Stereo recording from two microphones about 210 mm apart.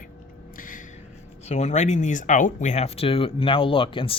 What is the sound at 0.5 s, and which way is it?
Gasp, 40° left (ahead or behind).